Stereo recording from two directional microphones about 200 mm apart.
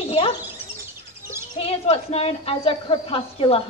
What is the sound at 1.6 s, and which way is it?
A woman's voice, 30° left (ahead or behind).